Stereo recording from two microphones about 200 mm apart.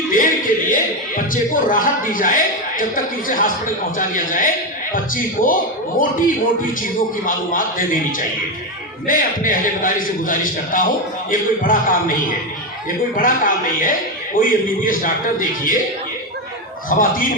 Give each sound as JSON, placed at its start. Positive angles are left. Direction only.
{"t": 0.1, "sound": "a man's voice", "side_deg": 40}
{"t": 7.3, "sound": "a man's voice", "side_deg": 45}
{"t": 9.0, "sound": "a man's voice", "side_deg": 45}
{"t": 13.1, "sound": "a man's voice", "side_deg": 45}
{"t": 16.9, "sound": "a man's voice", "side_deg": 45}